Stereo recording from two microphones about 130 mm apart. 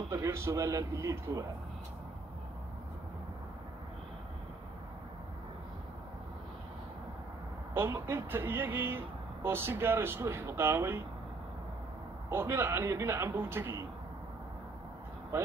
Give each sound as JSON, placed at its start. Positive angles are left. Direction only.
{"t": 0.1, "sound": "speech", "side_deg": -20}
{"t": 7.7, "sound": "speech", "side_deg": -20}
{"t": 12.3, "sound": "speech", "side_deg": -20}